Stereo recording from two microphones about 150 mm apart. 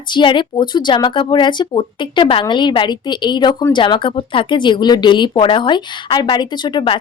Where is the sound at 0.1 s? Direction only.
30° left (ahead or behind).